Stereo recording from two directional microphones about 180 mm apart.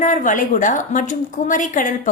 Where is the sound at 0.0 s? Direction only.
45° left (ahead or behind).